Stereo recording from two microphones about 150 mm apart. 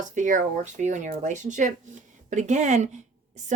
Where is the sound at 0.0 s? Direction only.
55° right (ahead or behind).